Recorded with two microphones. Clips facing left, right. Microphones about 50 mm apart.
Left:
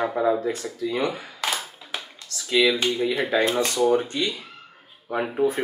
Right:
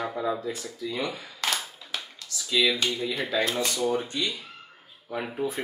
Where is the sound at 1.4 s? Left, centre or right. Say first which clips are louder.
Left 1 dB; centre.